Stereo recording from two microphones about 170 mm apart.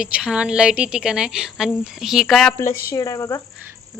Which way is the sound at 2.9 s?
20° left (ahead or behind).